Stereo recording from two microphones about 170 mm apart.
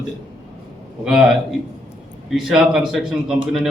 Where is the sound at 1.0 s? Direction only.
Centre (ahead or behind).